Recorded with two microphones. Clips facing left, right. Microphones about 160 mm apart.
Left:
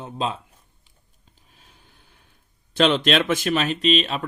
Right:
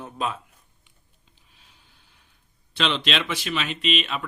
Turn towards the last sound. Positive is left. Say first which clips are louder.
# left 5 dB
turn(degrees=35)  # may be behind; listen again after turning